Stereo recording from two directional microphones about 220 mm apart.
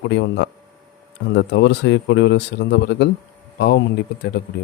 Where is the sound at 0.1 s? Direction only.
55° left (ahead or behind).